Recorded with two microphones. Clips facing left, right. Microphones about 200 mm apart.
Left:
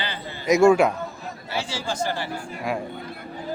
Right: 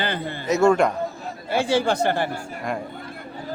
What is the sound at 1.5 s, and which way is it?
Speech, 55° right (ahead or behind).